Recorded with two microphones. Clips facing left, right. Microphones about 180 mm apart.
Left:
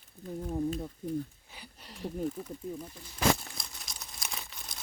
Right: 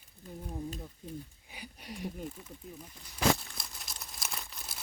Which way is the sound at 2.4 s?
40° left (ahead or behind).